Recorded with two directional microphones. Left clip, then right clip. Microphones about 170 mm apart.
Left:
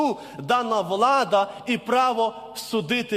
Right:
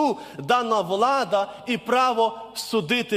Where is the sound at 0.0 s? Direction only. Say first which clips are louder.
Right 1 dB; 20° right (ahead or behind).